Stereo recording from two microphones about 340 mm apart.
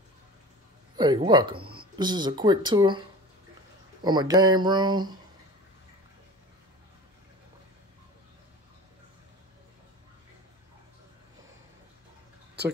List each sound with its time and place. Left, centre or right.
0.9 s speech: centre
1.6 s speech: right
2.0 s speech: centre
4.0 s speech: centre